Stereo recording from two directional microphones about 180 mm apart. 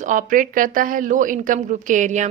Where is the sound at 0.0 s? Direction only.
45° right (ahead or behind).